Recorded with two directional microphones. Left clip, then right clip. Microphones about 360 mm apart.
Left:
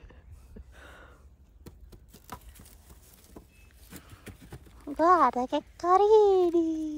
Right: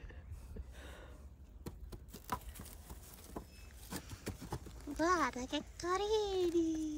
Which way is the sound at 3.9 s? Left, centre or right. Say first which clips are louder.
Right 2 dB; right.